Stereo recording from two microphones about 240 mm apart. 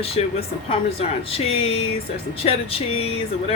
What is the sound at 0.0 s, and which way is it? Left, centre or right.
Speech, left.